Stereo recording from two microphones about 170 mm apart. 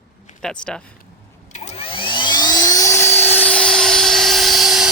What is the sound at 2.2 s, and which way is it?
Helicopter, 25° left (ahead or behind).